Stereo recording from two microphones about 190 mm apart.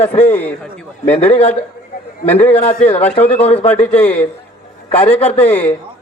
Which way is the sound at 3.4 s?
35° left (ahead or behind).